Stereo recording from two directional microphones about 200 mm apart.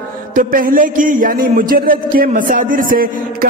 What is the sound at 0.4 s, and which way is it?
A man's voice, 45° right (ahead or behind).